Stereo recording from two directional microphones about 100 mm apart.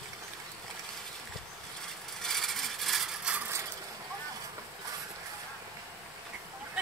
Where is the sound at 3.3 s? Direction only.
25° right (ahead or behind).